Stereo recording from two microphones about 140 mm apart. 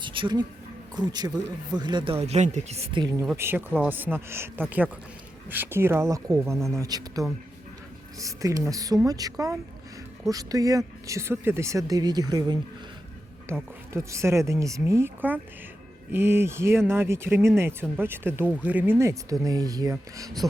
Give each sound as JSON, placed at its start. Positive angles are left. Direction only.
{"t": 0.0, "sound": "a sound", "side_deg": -35}
{"t": 0.9, "sound": "speech", "side_deg": -30}
{"t": 2.2, "sound": "speech", "side_deg": -55}
{"t": 2.9, "sound": "speech", "side_deg": -30}
{"t": 3.3, "sound": "speech", "side_deg": -15}
{"t": 13.5, "sound": "speech", "side_deg": -20}